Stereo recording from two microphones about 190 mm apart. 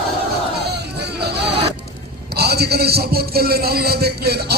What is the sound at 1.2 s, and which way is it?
Zipper, 60° right (ahead or behind).